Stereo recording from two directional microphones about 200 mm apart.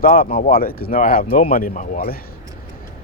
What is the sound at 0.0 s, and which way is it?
Speech, 45° left (ahead or behind).